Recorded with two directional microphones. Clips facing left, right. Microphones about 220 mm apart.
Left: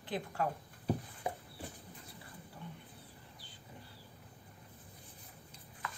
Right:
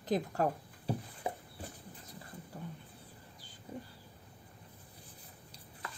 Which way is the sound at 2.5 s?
45° right (ahead or behind).